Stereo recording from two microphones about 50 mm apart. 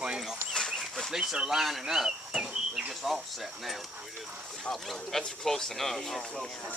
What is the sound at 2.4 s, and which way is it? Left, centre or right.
Cricket, centre.